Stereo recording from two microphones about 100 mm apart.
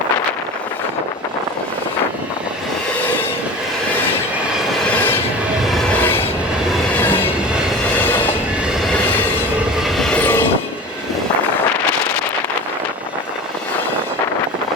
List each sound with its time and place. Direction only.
6.0 s train: 20° left (ahead or behind)
9.8 s train: 5° left (ahead or behind)
10.2 s train: 20° left (ahead or behind)